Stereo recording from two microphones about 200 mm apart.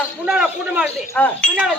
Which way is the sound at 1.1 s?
5° left (ahead or behind).